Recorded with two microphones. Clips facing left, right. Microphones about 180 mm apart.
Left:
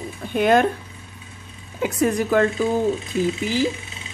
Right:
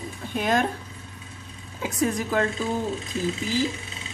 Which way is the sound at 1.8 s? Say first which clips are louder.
Left 5 dB; 60° left (ahead or behind).